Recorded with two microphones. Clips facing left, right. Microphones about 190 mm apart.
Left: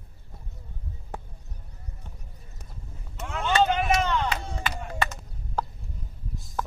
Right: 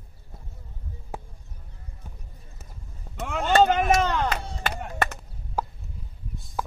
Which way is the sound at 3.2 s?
60° right (ahead or behind).